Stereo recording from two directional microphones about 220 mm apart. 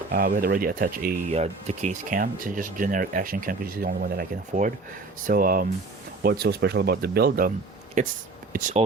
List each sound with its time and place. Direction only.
0.1 s speech: 40° right (ahead or behind)